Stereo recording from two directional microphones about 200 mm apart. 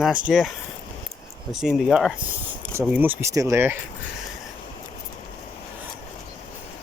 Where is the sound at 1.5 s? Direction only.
Centre (ahead or behind).